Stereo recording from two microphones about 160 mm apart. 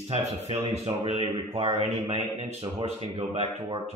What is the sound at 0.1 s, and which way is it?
A man's voice, 35° right (ahead or behind).